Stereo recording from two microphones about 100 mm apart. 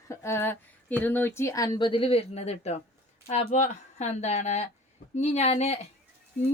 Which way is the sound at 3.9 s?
90° left.